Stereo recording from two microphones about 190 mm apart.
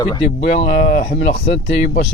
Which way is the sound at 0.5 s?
55° left (ahead or behind).